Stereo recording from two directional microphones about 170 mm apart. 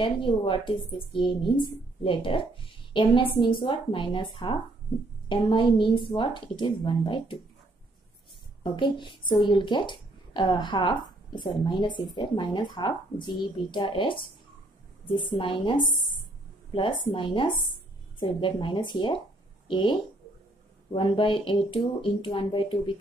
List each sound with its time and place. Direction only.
0.0 s a woman's voice: 30° left (ahead or behind)
8.6 s a woman's voice: 30° left (ahead or behind)